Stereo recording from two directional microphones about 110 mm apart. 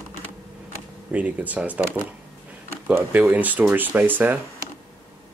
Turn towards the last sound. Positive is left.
turn(degrees=-15)  # may be behind; listen again after turning